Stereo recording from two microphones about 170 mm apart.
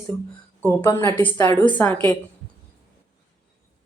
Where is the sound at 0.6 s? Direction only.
10° left (ahead or behind).